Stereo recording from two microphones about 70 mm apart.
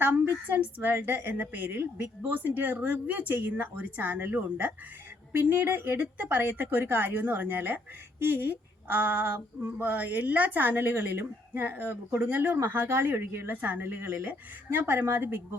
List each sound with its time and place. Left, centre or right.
0.5 s a woman's voice: right